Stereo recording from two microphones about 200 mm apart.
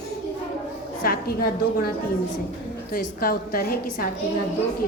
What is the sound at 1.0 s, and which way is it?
Speech, 50° left (ahead or behind).